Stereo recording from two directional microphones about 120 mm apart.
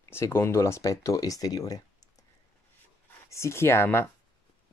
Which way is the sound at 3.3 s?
25° left (ahead or behind).